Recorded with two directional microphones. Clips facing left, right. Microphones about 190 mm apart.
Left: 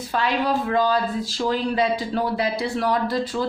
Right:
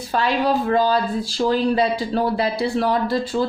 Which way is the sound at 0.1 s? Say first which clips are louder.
Right 3 dB; 35° right (ahead or behind).